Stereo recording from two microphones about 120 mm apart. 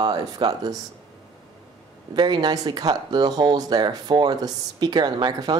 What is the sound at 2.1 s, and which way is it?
A woman's voice, 40° right (ahead or behind).